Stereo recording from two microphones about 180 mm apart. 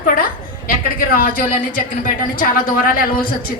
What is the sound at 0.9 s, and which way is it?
A woman's voice, 50° left (ahead or behind).